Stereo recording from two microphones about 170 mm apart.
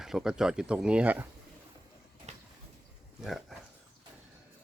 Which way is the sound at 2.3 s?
40° right (ahead or behind).